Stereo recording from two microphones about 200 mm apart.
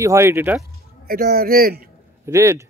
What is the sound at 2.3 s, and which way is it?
Speech, 15° right (ahead or behind).